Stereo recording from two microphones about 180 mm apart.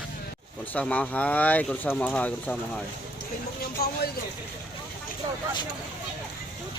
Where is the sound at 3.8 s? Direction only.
60° left (ahead or behind).